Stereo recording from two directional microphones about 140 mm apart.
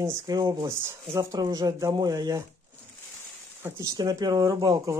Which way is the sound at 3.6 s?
20° right (ahead or behind).